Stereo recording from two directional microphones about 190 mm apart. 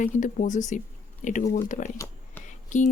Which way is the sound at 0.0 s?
40° left (ahead or behind).